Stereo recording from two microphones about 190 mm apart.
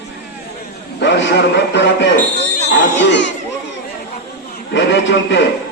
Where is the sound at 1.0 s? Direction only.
70° left (ahead or behind).